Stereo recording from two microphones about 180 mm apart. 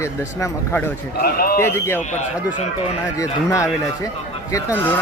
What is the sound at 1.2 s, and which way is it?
Speech, 55° left (ahead or behind).